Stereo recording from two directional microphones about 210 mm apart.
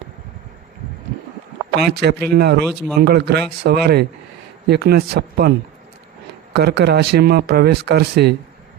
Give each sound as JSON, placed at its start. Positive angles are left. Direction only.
{"t": 1.7, "sound": "speech", "side_deg": -50}